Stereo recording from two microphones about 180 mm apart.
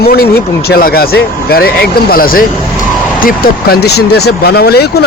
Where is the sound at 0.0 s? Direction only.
60° left (ahead or behind).